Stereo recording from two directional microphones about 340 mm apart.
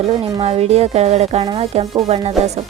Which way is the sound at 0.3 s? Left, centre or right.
Centre.